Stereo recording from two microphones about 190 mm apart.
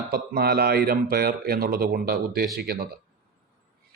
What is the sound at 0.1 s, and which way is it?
A man's voice, 55° right (ahead or behind).